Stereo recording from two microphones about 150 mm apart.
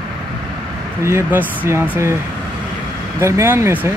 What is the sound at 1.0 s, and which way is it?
Speech, 15° right (ahead or behind).